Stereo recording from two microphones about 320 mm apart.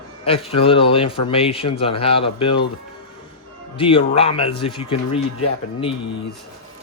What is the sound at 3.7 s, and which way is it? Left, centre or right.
Speech, centre.